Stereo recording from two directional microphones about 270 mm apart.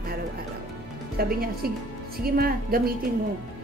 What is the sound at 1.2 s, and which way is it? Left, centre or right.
A woman's voice, right.